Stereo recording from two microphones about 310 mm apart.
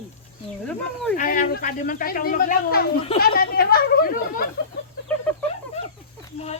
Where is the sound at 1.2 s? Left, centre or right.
Left.